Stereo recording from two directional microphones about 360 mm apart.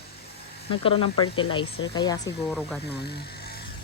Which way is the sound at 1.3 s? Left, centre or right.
Centre.